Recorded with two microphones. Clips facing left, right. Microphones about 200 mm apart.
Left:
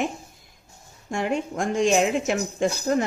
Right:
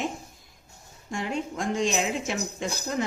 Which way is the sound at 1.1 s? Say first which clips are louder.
Left 5 dB; 55° left (ahead or behind).